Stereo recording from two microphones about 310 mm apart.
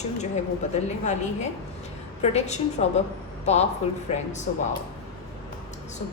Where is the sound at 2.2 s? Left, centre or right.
Left.